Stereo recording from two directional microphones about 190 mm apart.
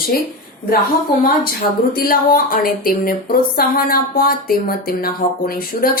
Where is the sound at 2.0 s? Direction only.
50° left (ahead or behind).